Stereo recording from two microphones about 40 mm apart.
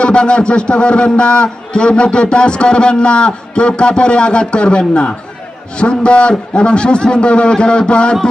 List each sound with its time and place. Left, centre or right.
0.0 s a man's voice: left